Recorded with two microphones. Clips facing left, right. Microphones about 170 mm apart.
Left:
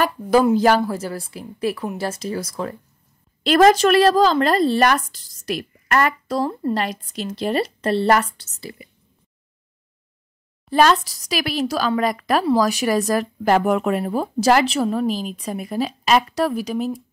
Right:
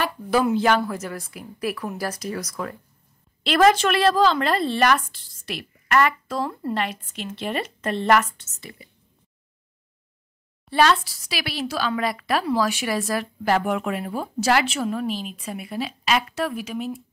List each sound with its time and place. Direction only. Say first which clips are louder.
0.0 s a woman's voice: left 5 dB; 40° left (ahead or behind)
3.4 s speech: left 4 dB; 40° left (ahead or behind)
10.7 s speech: left 3 dB; 45° left (ahead or behind)